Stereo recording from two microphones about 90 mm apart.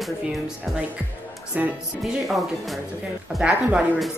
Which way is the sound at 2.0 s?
Centre (ahead or behind).